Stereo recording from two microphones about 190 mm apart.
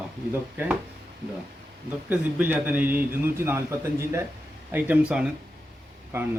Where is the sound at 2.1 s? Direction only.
10° right (ahead or behind).